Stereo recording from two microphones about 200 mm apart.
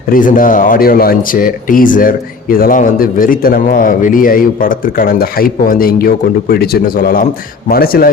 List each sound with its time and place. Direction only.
0.1 s speech: 40° left (ahead or behind)